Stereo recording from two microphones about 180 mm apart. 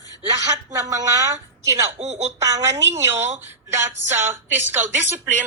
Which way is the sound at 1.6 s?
15° right (ahead or behind).